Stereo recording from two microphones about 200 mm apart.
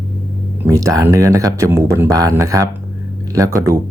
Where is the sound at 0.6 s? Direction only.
15° right (ahead or behind).